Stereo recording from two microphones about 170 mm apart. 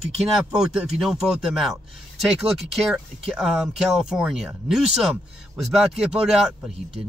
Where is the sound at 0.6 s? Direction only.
5° right (ahead or behind).